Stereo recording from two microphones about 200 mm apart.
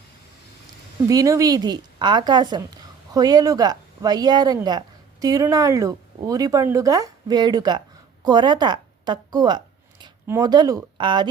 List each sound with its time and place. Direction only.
1.0 s speech: 15° right (ahead or behind)
8.2 s a sound: 20° right (ahead or behind)
10.2 s speech: 15° right (ahead or behind)